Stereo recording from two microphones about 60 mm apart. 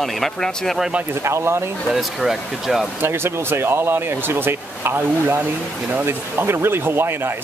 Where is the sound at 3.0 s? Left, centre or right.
Right.